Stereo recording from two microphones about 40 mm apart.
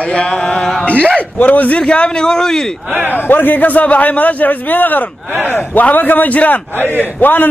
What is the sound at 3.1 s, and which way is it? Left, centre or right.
A man's voice, left.